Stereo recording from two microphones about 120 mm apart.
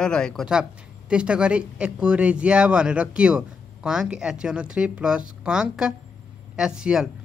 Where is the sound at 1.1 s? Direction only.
10° right (ahead or behind).